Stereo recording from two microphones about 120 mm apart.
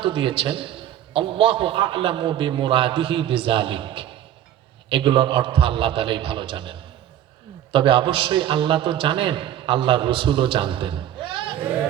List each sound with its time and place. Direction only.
0.0 s a man's voice: 45° right (ahead or behind)